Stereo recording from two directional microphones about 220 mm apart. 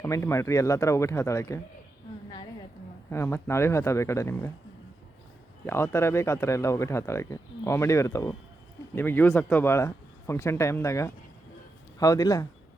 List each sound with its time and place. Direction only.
0.0 s speech: 10° left (ahead or behind)
3.1 s speech: 10° left (ahead or behind)
5.6 s speech: 10° left (ahead or behind)